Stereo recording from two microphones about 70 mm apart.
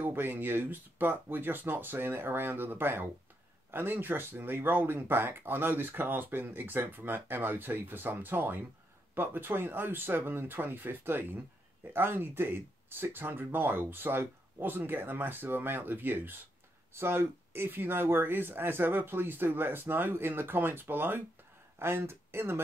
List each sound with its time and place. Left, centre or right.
0.0 s speech: right